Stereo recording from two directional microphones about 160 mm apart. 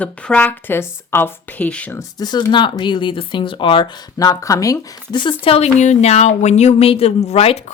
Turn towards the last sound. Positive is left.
turn(degrees=40)  # may be behind; listen again after turning